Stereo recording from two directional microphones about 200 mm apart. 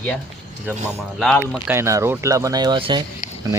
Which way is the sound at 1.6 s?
15° right (ahead or behind).